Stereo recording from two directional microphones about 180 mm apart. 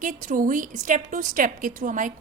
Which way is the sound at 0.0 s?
45° right (ahead or behind).